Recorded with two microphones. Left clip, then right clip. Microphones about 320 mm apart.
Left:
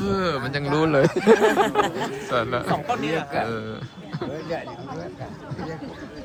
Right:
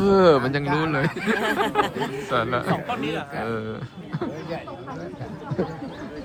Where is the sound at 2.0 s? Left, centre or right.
Left.